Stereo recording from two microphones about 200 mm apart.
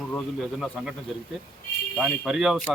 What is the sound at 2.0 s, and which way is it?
Speech, centre (ahead or behind).